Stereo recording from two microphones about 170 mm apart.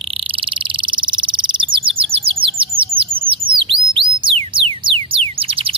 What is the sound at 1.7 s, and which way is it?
Chirp, 30° right (ahead or behind).